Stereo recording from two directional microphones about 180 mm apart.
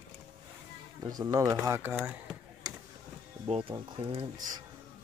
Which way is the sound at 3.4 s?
30° right (ahead or behind).